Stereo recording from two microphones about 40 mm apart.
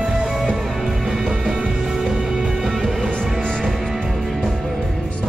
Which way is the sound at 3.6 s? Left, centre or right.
Centre.